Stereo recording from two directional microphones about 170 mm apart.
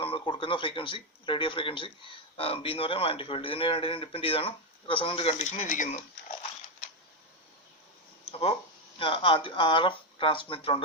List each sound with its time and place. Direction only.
0.0 s speech: 30° left (ahead or behind); by 6.0 s 50° left (ahead or behind)
8.2 s a sound: 35° left (ahead or behind)
9.0 s speech: 30° left (ahead or behind)